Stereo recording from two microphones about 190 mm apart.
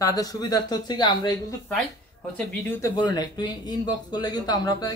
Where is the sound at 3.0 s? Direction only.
20° left (ahead or behind).